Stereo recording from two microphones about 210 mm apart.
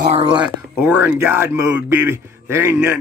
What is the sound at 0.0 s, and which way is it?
Speech, 25° right (ahead or behind).